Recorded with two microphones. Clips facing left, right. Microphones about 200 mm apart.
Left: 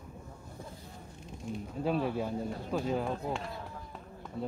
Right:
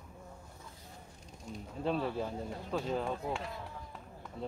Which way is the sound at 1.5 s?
40° right (ahead or behind).